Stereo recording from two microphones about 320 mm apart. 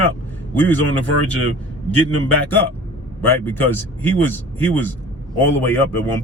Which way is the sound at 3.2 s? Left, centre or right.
Centre.